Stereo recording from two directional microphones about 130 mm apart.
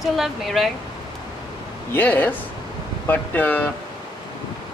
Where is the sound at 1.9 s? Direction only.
15° left (ahead or behind).